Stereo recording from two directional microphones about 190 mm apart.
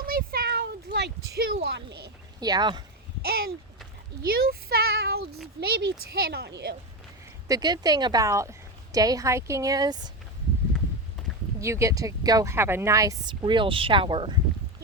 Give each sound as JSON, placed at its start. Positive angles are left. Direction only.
{"t": 0.0, "sound": "a sound", "side_deg": -50}
{"t": 2.4, "sound": "a woman's voice", "side_deg": -20}
{"t": 3.2, "sound": "a child's voice", "side_deg": -55}
{"t": 4.4, "sound": "child singing", "side_deg": -55}
{"t": 5.5, "sound": "speech", "side_deg": -55}
{"t": 7.4, "sound": "a woman's voice", "side_deg": -20}
{"t": 11.6, "sound": "speech", "side_deg": -15}